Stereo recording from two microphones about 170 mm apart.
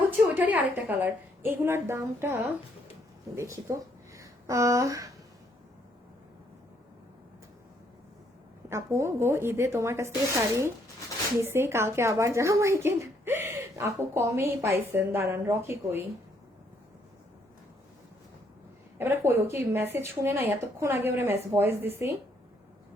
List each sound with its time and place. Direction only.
0.3 s speech: 10° right (ahead or behind)
8.7 s speech: 15° right (ahead or behind)
18.9 s speech: 15° right (ahead or behind)